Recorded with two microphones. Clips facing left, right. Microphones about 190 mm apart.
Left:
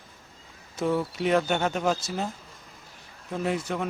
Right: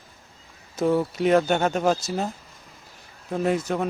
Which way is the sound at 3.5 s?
40° right (ahead or behind).